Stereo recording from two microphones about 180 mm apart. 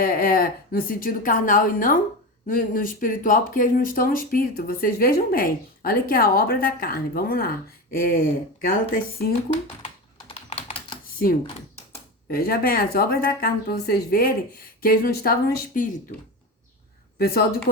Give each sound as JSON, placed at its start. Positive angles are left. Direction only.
{"t": 0.0, "sound": "speech", "side_deg": 50}
{"t": 9.8, "sound": "typing", "side_deg": 35}
{"t": 12.3, "sound": "speech", "side_deg": 55}
{"t": 17.2, "sound": "speech", "side_deg": 60}